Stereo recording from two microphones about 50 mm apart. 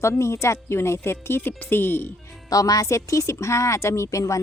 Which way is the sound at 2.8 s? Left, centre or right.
Left.